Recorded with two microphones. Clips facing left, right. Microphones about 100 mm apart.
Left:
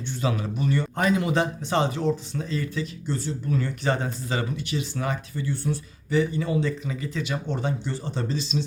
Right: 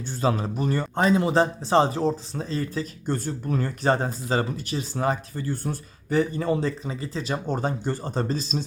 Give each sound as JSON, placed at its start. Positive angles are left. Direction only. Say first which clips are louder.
{"t": 0.2, "sound": "speech", "louder": "right 3 dB", "side_deg": -35}
{"t": 3.1, "sound": "speech", "louder": "right 2 dB", "side_deg": -45}